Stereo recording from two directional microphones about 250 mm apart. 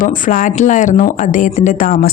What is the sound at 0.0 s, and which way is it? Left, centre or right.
Speech, left.